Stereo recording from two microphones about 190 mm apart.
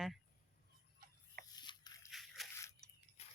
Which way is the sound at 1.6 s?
20° left (ahead or behind).